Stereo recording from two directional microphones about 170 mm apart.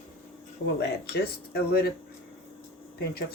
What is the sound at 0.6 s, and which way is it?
Speech, 80° left.